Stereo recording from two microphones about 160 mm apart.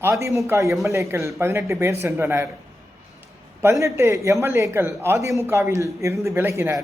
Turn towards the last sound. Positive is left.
turn(degrees=-15)  # may be behind; listen again after turning